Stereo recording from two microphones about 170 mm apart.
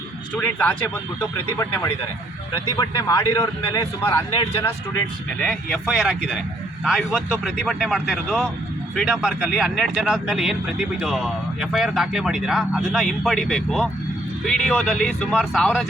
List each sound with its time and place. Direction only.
0.3 s a man's voice: 5° left (ahead or behind)
2.7 s a man's voice: 20° left (ahead or behind)
5.4 s speech: 5° left (ahead or behind)